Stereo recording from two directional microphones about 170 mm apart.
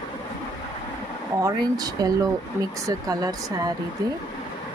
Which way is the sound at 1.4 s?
20° right (ahead or behind).